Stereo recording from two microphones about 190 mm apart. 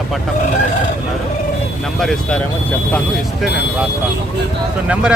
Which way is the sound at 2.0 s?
Centre (ahead or behind).